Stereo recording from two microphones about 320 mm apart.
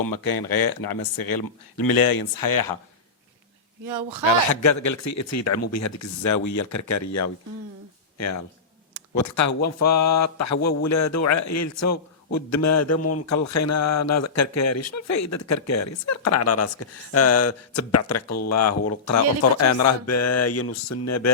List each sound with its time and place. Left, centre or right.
0.0 s speech: left
4.3 s speech: left
9.1 s speech: left